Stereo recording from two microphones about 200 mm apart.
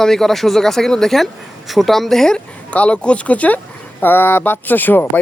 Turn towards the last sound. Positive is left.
turn(degrees=10)  # may be behind; listen again after turning